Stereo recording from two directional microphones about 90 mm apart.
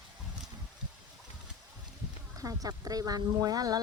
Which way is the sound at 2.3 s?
40° right (ahead or behind).